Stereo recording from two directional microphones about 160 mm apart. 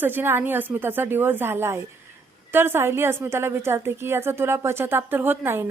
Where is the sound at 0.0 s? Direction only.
10° right (ahead or behind).